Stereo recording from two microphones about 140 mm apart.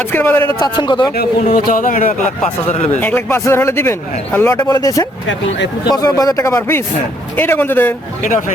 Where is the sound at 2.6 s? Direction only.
50° left (ahead or behind).